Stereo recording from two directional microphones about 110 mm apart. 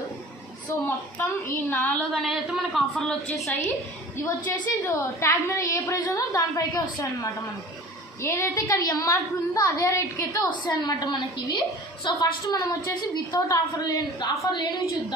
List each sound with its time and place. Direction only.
0.8 s a woman's voice: 20° left (ahead or behind)
2.2 s a woman's voice: 5° right (ahead or behind)
4.8 s a woman's voice: 20° left (ahead or behind)
10.5 s a woman's voice: 40° left (ahead or behind)